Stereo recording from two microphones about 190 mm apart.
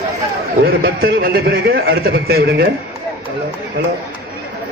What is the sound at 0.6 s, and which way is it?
A man's voice, 55° right (ahead or behind).